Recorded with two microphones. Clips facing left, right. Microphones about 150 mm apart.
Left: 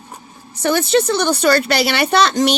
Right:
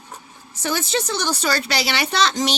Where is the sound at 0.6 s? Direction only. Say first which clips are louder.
Left 8 dB; 60° left (ahead or behind).